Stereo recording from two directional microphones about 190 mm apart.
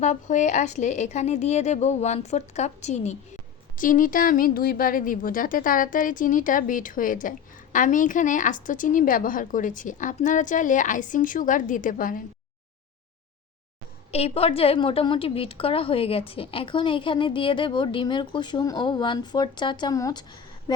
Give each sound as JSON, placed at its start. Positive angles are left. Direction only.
{"t": 0.0, "sound": "a woman's voice", "side_deg": 40}
{"t": 14.1, "sound": "a woman's voice", "side_deg": 30}